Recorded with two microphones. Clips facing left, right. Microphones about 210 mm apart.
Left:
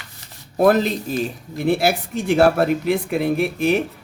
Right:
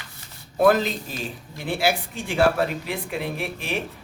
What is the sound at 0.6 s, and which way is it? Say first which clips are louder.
Speech: left 3 dB; 40° left (ahead or behind).